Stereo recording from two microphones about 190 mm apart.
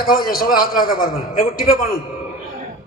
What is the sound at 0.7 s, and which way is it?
Speech, 20° left (ahead or behind).